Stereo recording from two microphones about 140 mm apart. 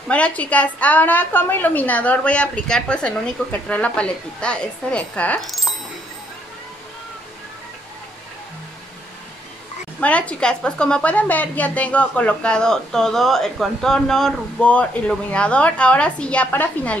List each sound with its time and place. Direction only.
0.1 s a woman's voice: 10° left (ahead or behind)
9.9 s a woman's voice: 10° left (ahead or behind)